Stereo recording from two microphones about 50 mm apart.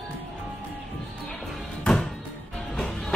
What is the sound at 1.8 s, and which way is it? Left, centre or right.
Music, centre.